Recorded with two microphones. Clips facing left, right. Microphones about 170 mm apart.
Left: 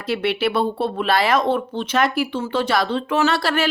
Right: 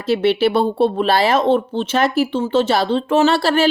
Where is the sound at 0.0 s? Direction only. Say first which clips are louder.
Right 6 dB; 30° right (ahead or behind).